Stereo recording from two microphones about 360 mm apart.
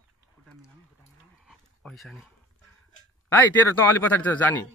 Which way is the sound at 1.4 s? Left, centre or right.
Centre.